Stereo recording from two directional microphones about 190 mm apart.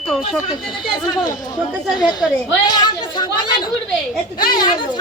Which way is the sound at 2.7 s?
20° left (ahead or behind).